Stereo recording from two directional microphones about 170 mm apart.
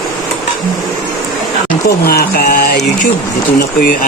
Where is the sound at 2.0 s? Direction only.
65° left (ahead or behind).